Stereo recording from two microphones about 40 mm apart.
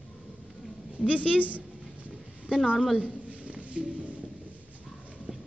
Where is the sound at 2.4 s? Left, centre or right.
Right.